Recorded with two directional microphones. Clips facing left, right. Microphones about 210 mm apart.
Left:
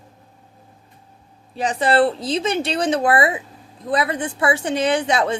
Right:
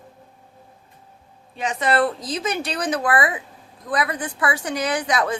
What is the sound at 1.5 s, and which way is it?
Speech, 35° left (ahead or behind).